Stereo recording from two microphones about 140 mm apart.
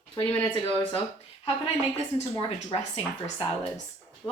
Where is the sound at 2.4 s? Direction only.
40° left (ahead or behind).